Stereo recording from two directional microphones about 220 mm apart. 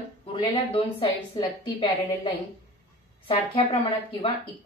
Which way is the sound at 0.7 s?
25° left (ahead or behind).